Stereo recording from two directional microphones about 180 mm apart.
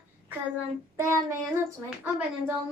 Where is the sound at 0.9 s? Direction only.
15° right (ahead or behind).